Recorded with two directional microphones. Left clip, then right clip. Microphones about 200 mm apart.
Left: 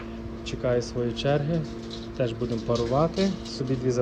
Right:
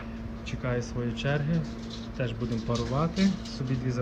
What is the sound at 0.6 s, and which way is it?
A man's voice, 15° left (ahead or behind).